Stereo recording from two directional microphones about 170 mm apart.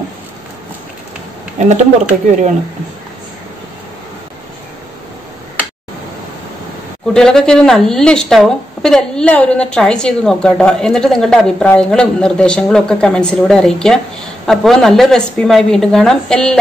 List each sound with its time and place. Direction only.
1.7 s speech: 45° right (ahead or behind)
7.2 s a woman's voice: 5° left (ahead or behind)